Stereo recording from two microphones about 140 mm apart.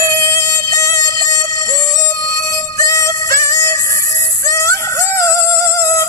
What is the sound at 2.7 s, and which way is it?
Music, 25° left (ahead or behind).